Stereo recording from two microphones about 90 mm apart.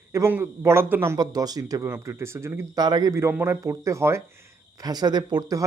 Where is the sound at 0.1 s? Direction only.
30° right (ahead or behind).